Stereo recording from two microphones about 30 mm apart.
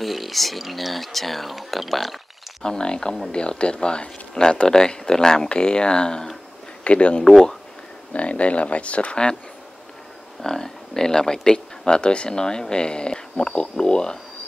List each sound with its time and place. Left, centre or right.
0.0 s speech: centre
2.6 s speech: left
5.5 s speech: left
6.8 s speech: left
10.4 s speech: centre; by 12.4 s left
12.4 s speech: left